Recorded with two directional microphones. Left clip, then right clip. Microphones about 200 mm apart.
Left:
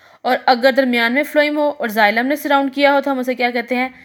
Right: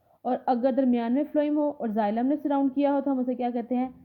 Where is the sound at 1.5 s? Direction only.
30° left (ahead or behind).